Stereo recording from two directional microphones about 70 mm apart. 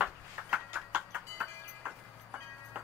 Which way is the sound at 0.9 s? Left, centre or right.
Centre.